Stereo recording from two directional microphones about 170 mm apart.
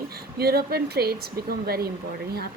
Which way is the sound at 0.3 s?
65° right (ahead or behind).